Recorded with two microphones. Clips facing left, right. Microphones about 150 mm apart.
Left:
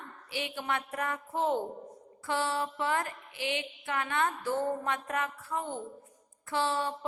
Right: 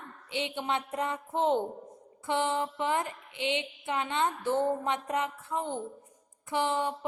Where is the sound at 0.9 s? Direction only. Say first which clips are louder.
Right 2 dB; 20° right (ahead or behind).